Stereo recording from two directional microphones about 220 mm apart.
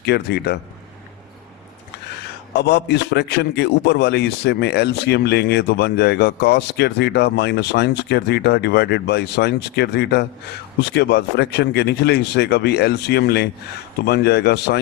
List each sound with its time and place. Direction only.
0.0 s a man's voice: 50° left (ahead or behind)
2.5 s a man's voice: 50° left (ahead or behind)